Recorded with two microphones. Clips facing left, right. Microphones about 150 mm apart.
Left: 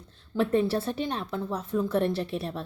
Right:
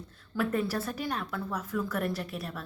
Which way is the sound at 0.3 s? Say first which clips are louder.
Left 5 dB; 30° left (ahead or behind).